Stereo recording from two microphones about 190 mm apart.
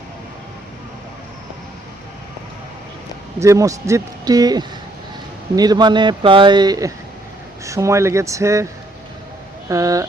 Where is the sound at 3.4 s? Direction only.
15° right (ahead or behind).